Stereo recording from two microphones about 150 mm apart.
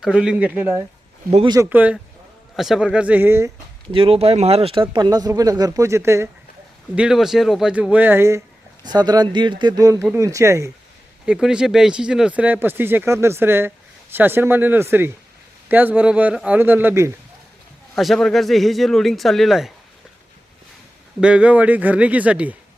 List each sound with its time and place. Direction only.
0.0 s speech: 5° right (ahead or behind)
3.9 s speech: 40° right (ahead or behind); by 6.2 s 20° right (ahead or behind)
6.9 s speech: 5° right (ahead or behind)
8.8 s speech: 30° right (ahead or behind)
11.3 s speech: 5° right (ahead or behind)
17.9 s a man's voice: centre (ahead or behind)
21.2 s speech: 5° right (ahead or behind)